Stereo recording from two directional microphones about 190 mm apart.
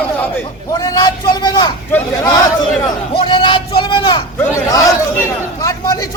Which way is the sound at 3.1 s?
25° left (ahead or behind).